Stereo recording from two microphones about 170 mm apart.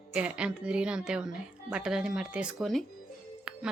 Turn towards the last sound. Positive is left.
turn(degrees=-5)  # may be behind; listen again after turning